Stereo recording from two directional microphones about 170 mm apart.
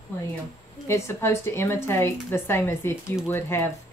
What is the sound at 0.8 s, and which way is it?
Speech, 15° left (ahead or behind).